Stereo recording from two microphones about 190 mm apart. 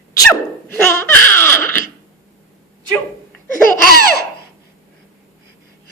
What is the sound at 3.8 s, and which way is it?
Laughter, 55° left (ahead or behind).